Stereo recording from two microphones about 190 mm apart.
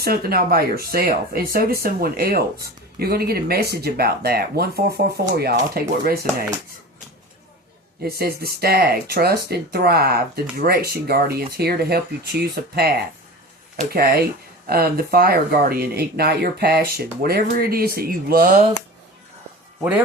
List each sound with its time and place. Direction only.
0.0 s speech: 55° right (ahead or behind)
8.0 s speech: 55° right (ahead or behind)